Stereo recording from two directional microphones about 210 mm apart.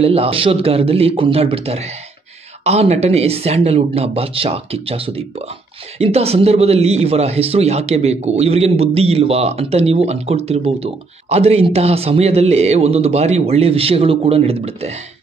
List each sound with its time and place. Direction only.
0.0 s speech: 30° right (ahead or behind)